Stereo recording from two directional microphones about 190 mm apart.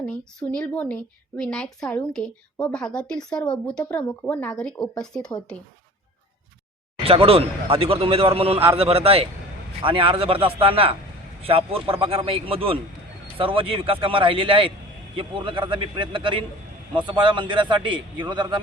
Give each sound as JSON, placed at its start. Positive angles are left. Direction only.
{"t": 0.0, "sound": "a woman's voice", "side_deg": 5}
{"t": 7.0, "sound": "a man's voice", "side_deg": -30}